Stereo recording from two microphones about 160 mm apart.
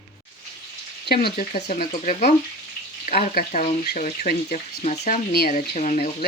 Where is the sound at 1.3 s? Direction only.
55° left (ahead or behind).